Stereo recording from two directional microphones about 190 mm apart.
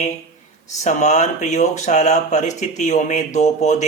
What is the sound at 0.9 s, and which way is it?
Speech, 40° left (ahead or behind).